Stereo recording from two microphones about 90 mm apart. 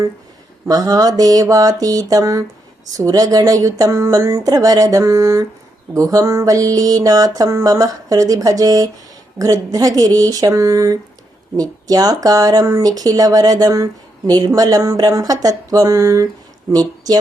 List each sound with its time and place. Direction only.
0.7 s speech: 45° right (ahead or behind)
2.9 s music: 40° right (ahead or behind)
9.4 s speech: 40° right (ahead or behind)